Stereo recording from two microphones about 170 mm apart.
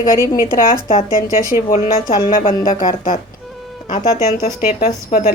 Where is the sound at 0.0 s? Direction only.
20° left (ahead or behind).